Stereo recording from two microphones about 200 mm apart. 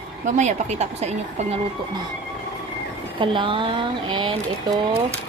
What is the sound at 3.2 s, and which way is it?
Speech, 25° right (ahead or behind).